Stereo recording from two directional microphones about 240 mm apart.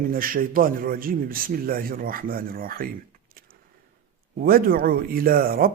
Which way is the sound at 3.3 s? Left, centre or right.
Right.